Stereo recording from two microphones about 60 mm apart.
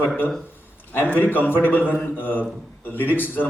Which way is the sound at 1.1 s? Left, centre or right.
Left.